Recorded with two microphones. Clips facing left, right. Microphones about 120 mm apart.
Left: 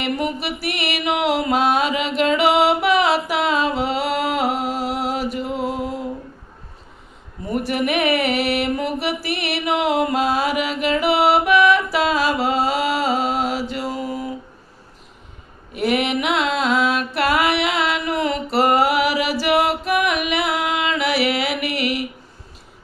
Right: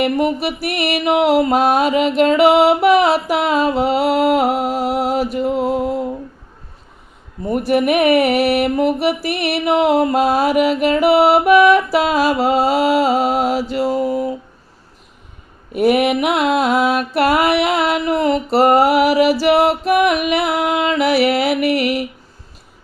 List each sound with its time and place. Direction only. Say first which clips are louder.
0.0 s mantra: right 7 dB; 40° right (ahead or behind)
7.4 s mantra: right 6 dB; 40° right (ahead or behind)
15.7 s mantra: right 6 dB; 45° right (ahead or behind)